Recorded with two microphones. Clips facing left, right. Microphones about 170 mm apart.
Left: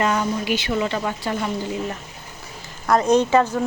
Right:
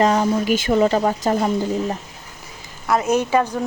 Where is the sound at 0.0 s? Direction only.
35° right (ahead or behind).